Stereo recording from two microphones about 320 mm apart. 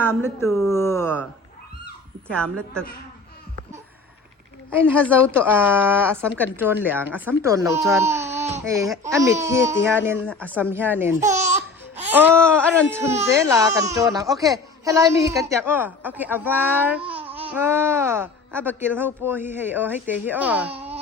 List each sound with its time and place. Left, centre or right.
0.0 s speech: centre
4.8 s speech: centre
20.7 s wail: centre